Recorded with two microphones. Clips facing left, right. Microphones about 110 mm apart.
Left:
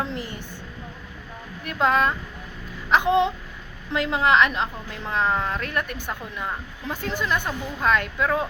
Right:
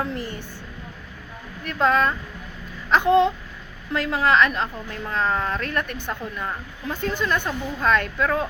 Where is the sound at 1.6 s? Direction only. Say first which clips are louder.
Right 1 dB; 15° left (ahead or behind).